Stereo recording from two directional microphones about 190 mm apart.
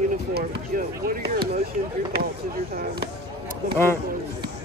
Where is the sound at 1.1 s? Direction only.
55° right (ahead or behind).